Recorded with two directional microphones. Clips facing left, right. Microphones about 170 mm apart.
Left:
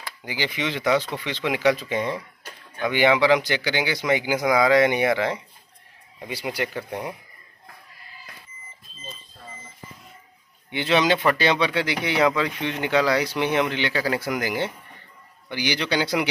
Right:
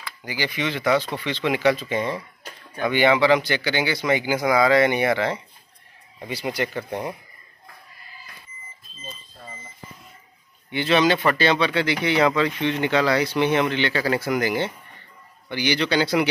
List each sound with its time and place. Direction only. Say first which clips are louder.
0.2 s speech: right 1 dB; 20° left (ahead or behind)
10.7 s speech: right 1 dB; 15° left (ahead or behind)